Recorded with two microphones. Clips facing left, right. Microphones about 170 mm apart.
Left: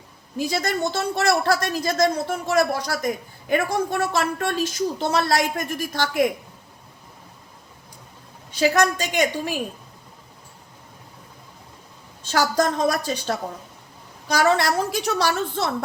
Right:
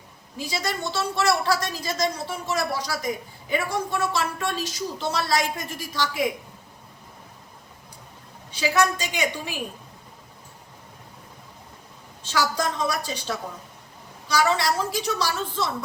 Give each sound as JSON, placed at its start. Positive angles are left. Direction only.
{"t": 0.3, "sound": "a woman's voice", "side_deg": 50}
{"t": 9.1, "sound": "a woman's voice", "side_deg": 50}
{"t": 12.3, "sound": "a woman's voice", "side_deg": 45}